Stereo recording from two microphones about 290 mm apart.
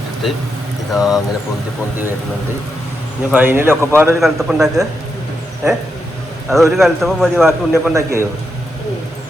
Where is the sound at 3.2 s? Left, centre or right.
Centre.